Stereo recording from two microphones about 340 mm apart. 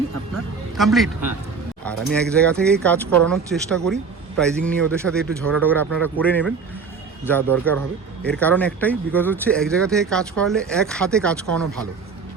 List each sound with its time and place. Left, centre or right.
0.8 s speech: centre